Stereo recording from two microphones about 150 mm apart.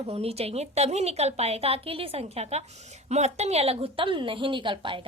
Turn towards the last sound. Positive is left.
turn(degrees=-35)  # may be behind; listen again after turning